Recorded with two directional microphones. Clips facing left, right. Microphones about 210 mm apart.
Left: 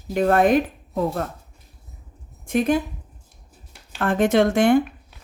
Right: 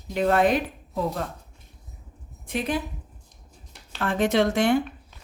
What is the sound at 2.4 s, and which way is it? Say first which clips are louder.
Speech: left 8 dB; 45° left (ahead or behind).